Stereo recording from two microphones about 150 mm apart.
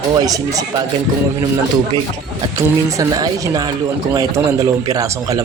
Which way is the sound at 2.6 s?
20° right (ahead or behind).